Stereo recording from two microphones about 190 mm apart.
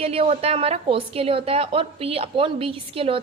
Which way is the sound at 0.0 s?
30° right (ahead or behind).